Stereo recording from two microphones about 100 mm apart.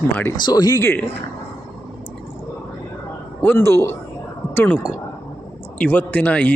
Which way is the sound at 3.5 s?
25° left (ahead or behind).